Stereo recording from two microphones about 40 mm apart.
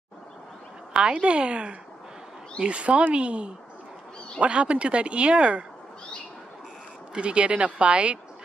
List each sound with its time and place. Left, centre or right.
0.9 s speech: right
7.2 s speech: right